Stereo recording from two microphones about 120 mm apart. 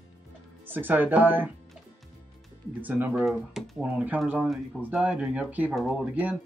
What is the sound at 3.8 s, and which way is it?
Speech, 15° right (ahead or behind).